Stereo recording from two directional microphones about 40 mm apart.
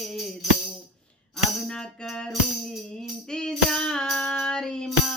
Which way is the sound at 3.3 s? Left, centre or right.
Centre.